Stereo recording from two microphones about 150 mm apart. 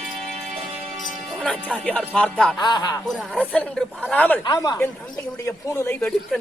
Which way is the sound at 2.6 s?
30° left (ahead or behind).